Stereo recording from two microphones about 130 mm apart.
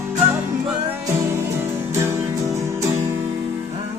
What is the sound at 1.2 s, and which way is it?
Music, 20° right (ahead or behind).